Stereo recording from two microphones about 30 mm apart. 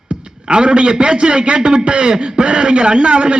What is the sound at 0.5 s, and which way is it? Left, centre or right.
A man's voice, right.